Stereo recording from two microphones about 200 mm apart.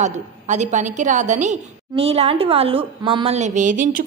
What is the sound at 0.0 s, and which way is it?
A woman's voice, 35° right (ahead or behind).